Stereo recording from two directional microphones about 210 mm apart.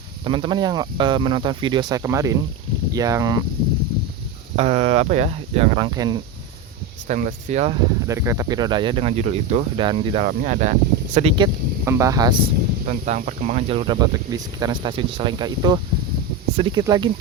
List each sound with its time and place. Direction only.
0.3 s speech: 25° right (ahead or behind)
4.5 s speech: 30° right (ahead or behind)
7.1 s speech: 35° right (ahead or behind)
8.0 s speech: 15° right (ahead or behind)
10.2 s speech: 35° right (ahead or behind); by 12.4 s 20° right (ahead or behind)
12.9 s speech: 40° right (ahead or behind); by 17.1 s 20° right (ahead or behind)